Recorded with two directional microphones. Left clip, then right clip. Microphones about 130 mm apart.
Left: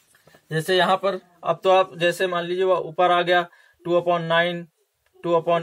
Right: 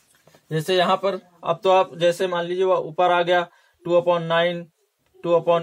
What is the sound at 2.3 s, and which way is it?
A man's voice, 35° right (ahead or behind).